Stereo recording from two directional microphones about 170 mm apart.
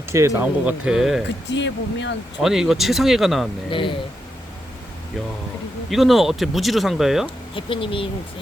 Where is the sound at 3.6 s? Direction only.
30° left (ahead or behind).